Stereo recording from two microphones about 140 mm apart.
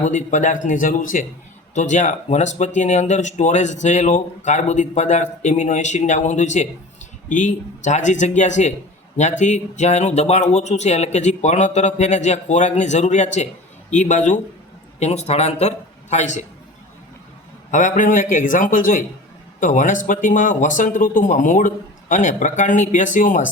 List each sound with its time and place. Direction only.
0.0 s speech: 60° left (ahead or behind)
1.7 s speech: 60° left (ahead or behind)
17.7 s speech: 60° left (ahead or behind)